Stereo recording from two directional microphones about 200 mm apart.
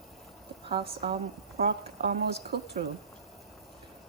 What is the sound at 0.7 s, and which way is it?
Speech, 25° right (ahead or behind).